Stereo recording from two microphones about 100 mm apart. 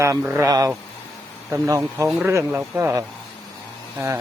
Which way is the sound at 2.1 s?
20° right (ahead or behind).